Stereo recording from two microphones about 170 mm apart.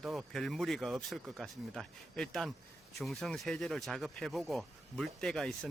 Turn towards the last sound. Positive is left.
turn(degrees=5)  # may be behind; listen again after turning